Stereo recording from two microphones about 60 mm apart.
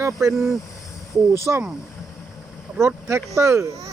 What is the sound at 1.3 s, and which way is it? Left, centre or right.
Speech, right.